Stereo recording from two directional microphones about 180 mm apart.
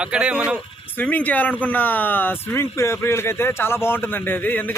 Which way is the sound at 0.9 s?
10° left (ahead or behind).